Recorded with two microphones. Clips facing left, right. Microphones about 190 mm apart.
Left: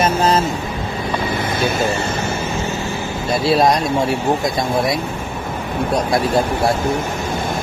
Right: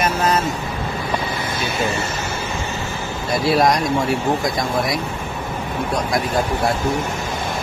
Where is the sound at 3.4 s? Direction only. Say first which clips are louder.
Left 1 dB; 25° left (ahead or behind).